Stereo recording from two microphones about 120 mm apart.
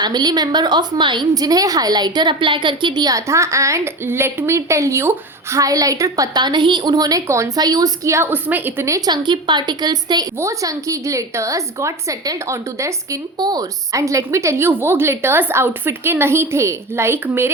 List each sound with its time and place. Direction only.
0.0 s a woman's voice: 35° right (ahead or behind); by 9.0 s 20° right (ahead or behind)
9.0 s a woman's voice: 35° right (ahead or behind); by 17.5 s 20° right (ahead or behind)